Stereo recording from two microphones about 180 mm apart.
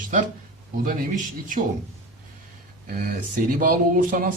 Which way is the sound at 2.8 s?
55° right (ahead or behind).